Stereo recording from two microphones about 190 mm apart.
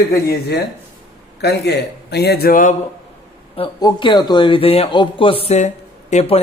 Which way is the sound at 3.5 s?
25° left (ahead or behind).